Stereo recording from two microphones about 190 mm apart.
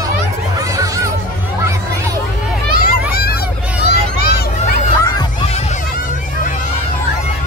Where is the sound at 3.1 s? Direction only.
55° left (ahead or behind).